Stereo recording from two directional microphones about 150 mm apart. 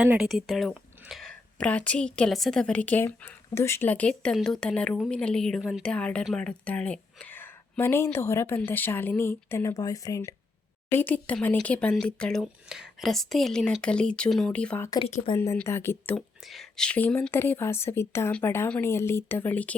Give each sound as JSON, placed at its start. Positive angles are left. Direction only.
{"t": 0.0, "sound": "speech", "side_deg": -5}
{"t": 10.9, "sound": "speech", "side_deg": 10}
{"t": 16.1, "sound": "speech", "side_deg": 5}